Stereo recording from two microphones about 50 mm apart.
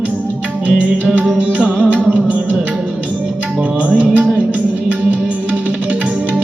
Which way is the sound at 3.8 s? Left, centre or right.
Right.